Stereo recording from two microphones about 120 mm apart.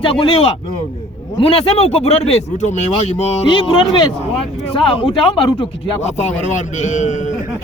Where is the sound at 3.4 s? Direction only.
45° left (ahead or behind).